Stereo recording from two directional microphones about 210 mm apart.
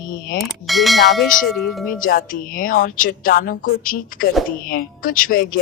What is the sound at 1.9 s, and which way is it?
Speech, 40° left (ahead or behind).